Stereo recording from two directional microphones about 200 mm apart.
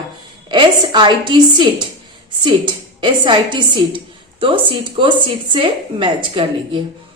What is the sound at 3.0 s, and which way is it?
A woman's voice, 25° right (ahead or behind).